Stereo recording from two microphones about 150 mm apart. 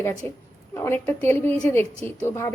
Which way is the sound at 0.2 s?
15° left (ahead or behind).